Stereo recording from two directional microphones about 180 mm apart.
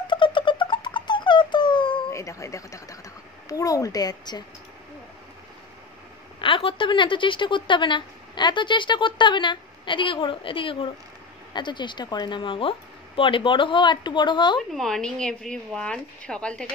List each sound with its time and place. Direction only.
0.1 s music: 25° left (ahead or behind)
3.4 s a woman's voice: 20° left (ahead or behind)
6.4 s a woman's voice: 30° left (ahead or behind)
14.7 s speech: centre (ahead or behind)